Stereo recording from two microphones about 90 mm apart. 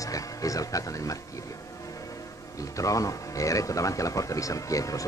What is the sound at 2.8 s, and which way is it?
Speech, 40° left (ahead or behind).